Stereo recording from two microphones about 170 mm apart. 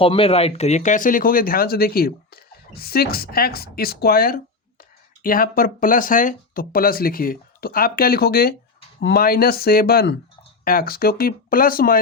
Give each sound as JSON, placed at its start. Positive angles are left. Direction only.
{"t": 0.0, "sound": "speech", "side_deg": 30}